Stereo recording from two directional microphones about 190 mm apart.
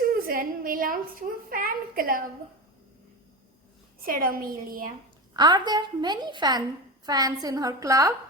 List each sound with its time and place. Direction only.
0.0 s a sound: 50° right (ahead or behind)
4.0 s a woman's voice: 50° right (ahead or behind)
5.4 s a woman's voice: 20° right (ahead or behind)